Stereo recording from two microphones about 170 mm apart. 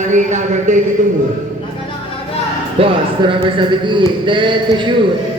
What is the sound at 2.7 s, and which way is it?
A man's voice, 30° right (ahead or behind).